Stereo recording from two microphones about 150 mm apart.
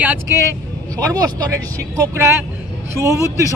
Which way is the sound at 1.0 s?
25° right (ahead or behind).